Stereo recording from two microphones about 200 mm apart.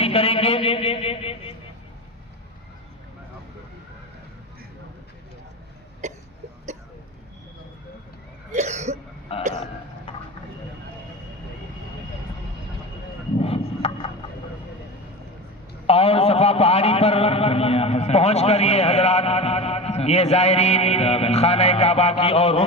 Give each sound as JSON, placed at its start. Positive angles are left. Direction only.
{"t": 0.0, "sound": "a man's voice", "side_deg": 30}
{"t": 8.5, "sound": "cough", "side_deg": -35}
{"t": 13.4, "sound": "a sound", "side_deg": 30}
{"t": 15.9, "sound": "a man's voice", "side_deg": 30}